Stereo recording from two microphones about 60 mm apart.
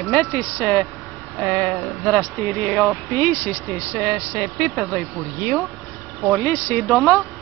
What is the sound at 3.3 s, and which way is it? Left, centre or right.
Speech, left.